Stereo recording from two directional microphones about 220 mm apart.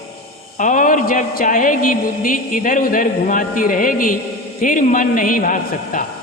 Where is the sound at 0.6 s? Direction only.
35° left (ahead or behind).